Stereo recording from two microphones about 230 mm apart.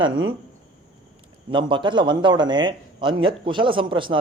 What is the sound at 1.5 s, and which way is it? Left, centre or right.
Speech, right.